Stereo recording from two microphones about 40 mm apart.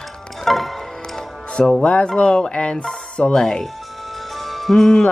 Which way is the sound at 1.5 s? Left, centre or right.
Left.